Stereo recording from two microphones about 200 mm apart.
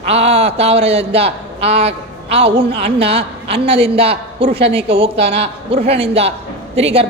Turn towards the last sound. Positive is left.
turn(degrees=-30)  # may be behind; listen again after turning